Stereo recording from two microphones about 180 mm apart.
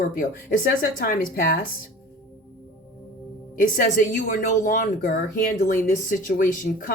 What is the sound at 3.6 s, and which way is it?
A woman's voice, 50° left (ahead or behind).